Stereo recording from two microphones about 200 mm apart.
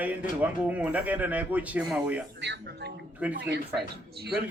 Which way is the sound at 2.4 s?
55° right (ahead or behind).